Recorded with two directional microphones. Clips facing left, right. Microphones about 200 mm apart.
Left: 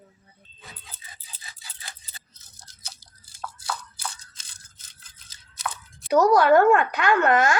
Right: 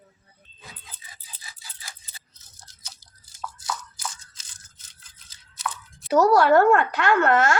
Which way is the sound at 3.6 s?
30° left (ahead or behind).